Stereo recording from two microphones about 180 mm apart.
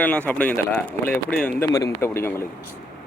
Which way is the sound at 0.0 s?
10° left (ahead or behind).